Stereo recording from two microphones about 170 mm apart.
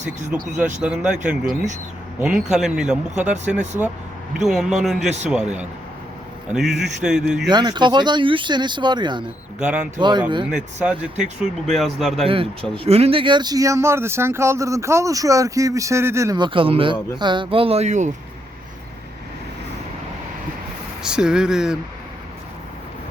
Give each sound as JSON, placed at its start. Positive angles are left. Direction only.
{"t": 0.3, "sound": "speech", "side_deg": -45}
{"t": 0.6, "sound": "speech", "side_deg": -5}
{"t": 4.4, "sound": "speech", "side_deg": 0}
{"t": 7.5, "sound": "speech", "side_deg": -25}
{"t": 9.2, "sound": "speech", "side_deg": -5}
{"t": 10.0, "sound": "speech", "side_deg": -25}
{"t": 10.5, "sound": "speech", "side_deg": -5}
{"t": 12.2, "sound": "speech", "side_deg": -35}
{"t": 21.0, "sound": "speech", "side_deg": -5}